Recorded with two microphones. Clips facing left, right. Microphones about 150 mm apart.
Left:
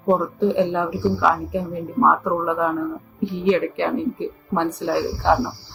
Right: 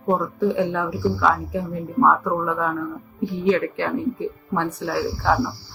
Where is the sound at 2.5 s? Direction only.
15° left (ahead or behind).